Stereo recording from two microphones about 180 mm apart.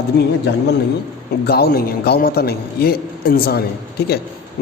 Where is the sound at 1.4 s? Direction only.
60° left (ahead or behind).